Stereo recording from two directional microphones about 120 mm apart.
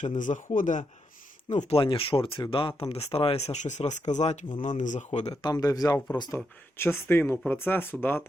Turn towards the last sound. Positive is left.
turn(degrees=15)  # may be behind; listen again after turning